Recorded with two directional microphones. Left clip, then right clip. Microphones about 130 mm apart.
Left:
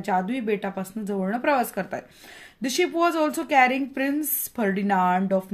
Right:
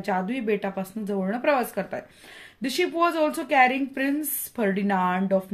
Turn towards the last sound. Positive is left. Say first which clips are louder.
# left 2 dB
turn(degrees=35)  # may be behind; listen again after turning